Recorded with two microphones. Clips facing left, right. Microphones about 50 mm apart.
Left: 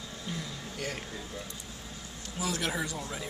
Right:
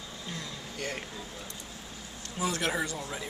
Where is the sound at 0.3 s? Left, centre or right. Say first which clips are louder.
Left 2 dB; centre.